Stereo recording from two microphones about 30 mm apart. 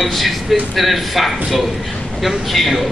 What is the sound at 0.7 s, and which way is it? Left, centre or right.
A man's voice, centre.